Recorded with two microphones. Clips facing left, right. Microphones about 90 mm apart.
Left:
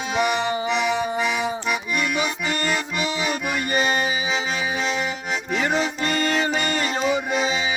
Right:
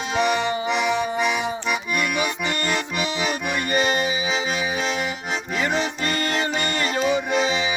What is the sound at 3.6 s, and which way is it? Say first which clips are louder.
Music: right 1 dB; 30° left (ahead or behind).